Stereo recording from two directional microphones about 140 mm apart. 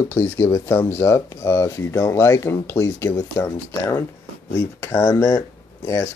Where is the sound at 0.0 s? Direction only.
20° left (ahead or behind).